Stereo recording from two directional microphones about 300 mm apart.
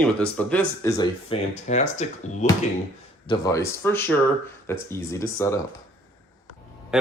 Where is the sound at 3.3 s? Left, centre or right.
Centre.